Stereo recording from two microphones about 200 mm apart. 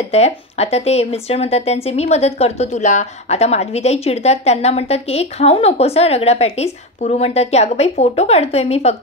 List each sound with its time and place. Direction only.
0.1 s speech: 30° left (ahead or behind)